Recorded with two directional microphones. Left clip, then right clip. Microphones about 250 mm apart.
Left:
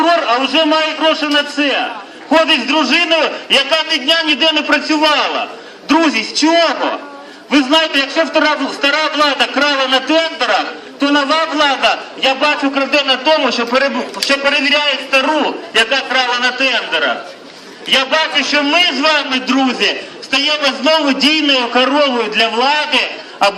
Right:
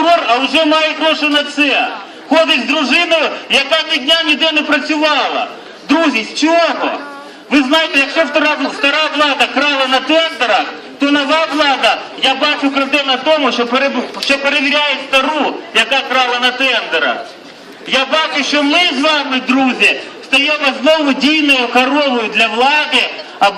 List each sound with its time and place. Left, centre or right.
0.0 s a man's voice: centre